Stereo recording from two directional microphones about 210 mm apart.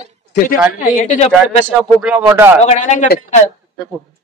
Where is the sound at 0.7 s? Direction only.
35° left (ahead or behind).